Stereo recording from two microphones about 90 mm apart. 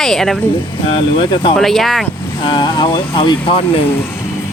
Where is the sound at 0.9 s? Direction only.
65° left (ahead or behind).